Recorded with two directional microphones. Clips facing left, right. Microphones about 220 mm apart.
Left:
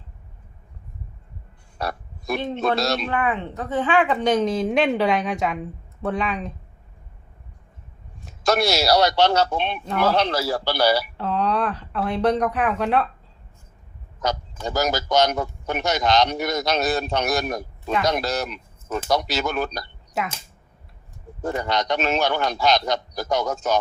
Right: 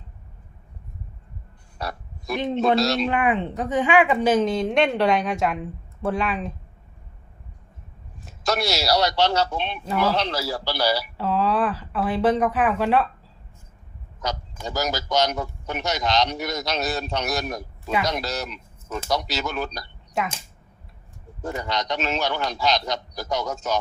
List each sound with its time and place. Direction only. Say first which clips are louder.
1.8 s a man's voice: left 3 dB; 55° left (ahead or behind)
3.1 s a woman's voice: right 2 dB; 15° right (ahead or behind)
8.4 s a man's voice: left 4 dB; 50° left (ahead or behind)
11.2 s a woman's voice: right 1 dB; 5° right (ahead or behind)
14.2 s a man's voice: left 4 dB; 55° left (ahead or behind)
20.2 s a woman's voice: right 1 dB; 5° left (ahead or behind)
21.4 s a man's voice: left 4 dB; 55° left (ahead or behind)